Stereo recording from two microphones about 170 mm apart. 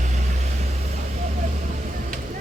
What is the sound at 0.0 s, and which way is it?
Vehicle, 45° right (ahead or behind).